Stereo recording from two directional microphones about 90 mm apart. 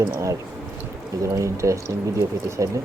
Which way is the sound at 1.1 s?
35° right (ahead or behind).